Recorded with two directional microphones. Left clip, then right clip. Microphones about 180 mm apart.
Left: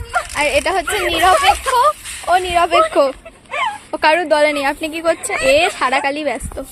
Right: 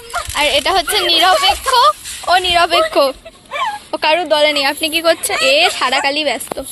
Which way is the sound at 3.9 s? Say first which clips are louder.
Left 2 dB; 10° left (ahead or behind).